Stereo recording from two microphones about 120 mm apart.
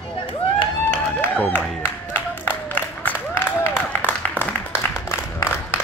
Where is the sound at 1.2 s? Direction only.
15° left (ahead or behind).